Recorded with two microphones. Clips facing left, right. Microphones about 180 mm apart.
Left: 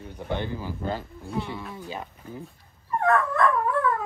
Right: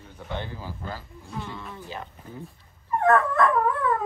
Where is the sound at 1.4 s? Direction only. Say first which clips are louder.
Left 3 dB; 10° left (ahead or behind).